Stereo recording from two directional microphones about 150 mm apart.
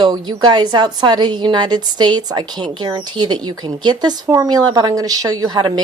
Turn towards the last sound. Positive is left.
turn(degrees=-25)  # may be behind; listen again after turning